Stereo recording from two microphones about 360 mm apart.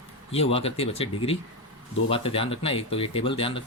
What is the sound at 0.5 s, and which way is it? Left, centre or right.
Speech, centre.